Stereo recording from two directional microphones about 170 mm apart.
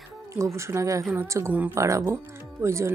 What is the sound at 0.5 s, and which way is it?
Speech, 15° right (ahead or behind).